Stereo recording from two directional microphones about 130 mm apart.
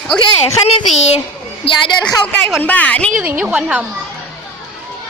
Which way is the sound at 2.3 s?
10° left (ahead or behind).